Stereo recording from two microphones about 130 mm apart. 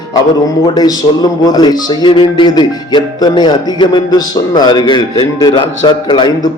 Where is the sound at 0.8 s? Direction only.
30° left (ahead or behind).